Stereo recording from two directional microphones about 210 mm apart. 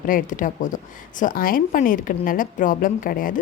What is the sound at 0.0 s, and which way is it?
A woman's voice, 40° left (ahead or behind).